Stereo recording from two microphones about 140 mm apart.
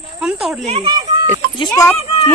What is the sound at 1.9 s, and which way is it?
Speech, 45° left (ahead or behind).